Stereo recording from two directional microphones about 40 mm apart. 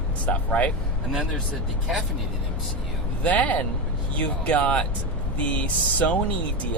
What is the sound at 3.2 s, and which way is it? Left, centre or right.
Speech, left.